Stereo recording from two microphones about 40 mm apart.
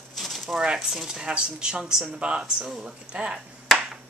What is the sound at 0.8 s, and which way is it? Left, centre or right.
Speech, centre.